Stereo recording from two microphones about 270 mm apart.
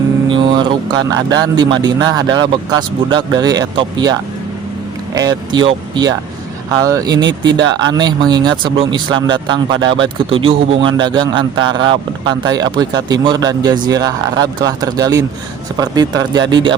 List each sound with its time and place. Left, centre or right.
0.3 s speech: centre